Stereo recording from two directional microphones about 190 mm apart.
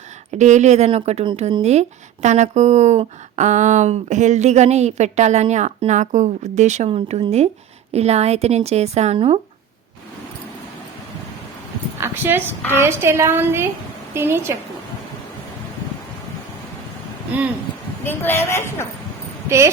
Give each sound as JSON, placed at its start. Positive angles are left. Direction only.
{"t": 0.3, "sound": "speech", "side_deg": -40}
{"t": 11.9, "sound": "a woman's voice", "side_deg": -10}
{"t": 17.3, "sound": "a woman's voice", "side_deg": -10}
{"t": 18.0, "sound": "a woman's voice", "side_deg": 10}
{"t": 19.5, "sound": "a woman's voice", "side_deg": -15}